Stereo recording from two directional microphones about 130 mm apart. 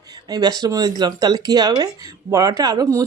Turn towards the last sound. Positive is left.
turn(degrees=-25)  # may be behind; listen again after turning